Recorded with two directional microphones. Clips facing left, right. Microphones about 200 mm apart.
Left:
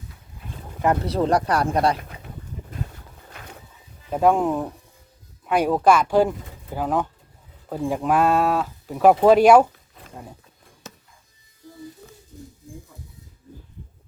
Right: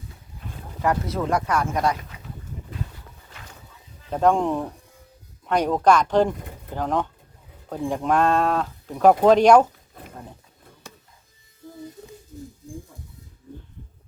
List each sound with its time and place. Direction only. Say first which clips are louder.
1.0 s speech: left 4 dB; 35° left (ahead or behind)
4.1 s speech: left 1 dB; 10° left (ahead or behind)